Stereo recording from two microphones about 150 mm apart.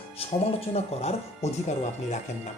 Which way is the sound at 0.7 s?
45° left (ahead or behind).